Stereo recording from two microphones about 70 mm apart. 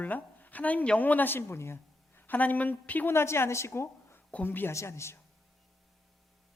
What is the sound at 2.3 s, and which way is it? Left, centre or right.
Speech, left.